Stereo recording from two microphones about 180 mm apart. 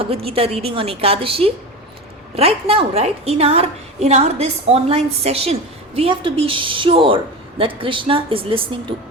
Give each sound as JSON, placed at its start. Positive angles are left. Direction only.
{"t": 0.0, "sound": "a woman's voice", "side_deg": -35}